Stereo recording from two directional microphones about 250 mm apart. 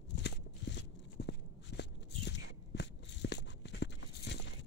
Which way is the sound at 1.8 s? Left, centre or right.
Left.